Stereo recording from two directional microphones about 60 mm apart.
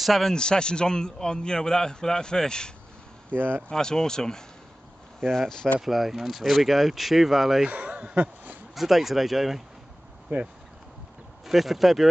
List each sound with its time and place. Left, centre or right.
0.0 s a man's voice: centre
0.3 s a man's voice: centre
3.3 s speech: right
3.7 s a man's voice: centre
5.8 s speech: centre
7.6 s speech: centre
8.7 s speech: centre
10.3 s speech: right
11.4 s speech: centre